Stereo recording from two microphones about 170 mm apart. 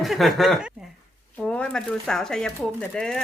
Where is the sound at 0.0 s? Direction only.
Centre (ahead or behind).